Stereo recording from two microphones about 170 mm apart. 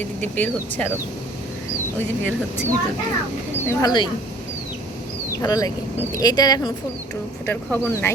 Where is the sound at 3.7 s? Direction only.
20° left (ahead or behind).